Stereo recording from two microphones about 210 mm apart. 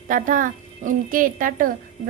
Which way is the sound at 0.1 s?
40° right (ahead or behind).